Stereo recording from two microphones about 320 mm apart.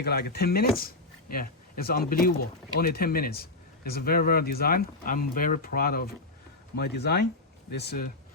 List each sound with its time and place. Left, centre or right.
0.0 s speech: left